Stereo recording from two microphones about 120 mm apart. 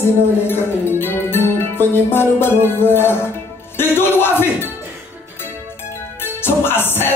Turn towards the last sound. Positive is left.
turn(degrees=20)  # may be behind; listen again after turning